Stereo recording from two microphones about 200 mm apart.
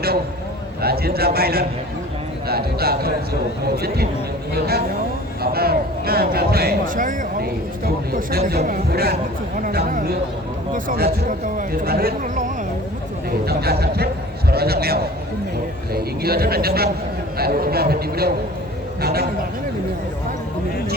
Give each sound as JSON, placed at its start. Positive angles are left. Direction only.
{"t": 0.8, "sound": "speech", "side_deg": -50}